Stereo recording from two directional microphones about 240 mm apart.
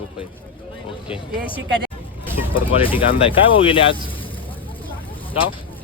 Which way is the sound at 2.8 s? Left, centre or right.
Left.